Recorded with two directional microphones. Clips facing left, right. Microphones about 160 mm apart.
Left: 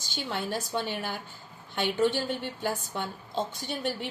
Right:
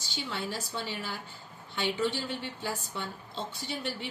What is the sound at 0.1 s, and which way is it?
A woman's voice, 50° left (ahead or behind).